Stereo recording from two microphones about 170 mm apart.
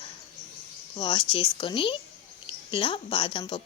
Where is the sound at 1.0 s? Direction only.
30° left (ahead or behind).